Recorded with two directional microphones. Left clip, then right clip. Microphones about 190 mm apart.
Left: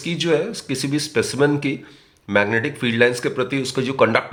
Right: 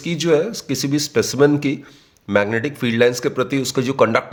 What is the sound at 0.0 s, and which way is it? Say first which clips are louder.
Speech: right 3 dB; 35° right (ahead or behind).